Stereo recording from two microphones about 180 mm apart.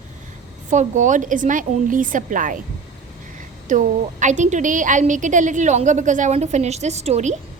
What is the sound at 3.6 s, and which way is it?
A woman's voice, 45° right (ahead or behind).